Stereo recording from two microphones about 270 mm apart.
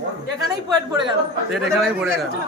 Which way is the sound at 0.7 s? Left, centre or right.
Centre.